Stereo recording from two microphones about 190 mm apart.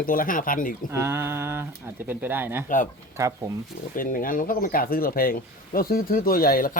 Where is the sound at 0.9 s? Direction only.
15° right (ahead or behind).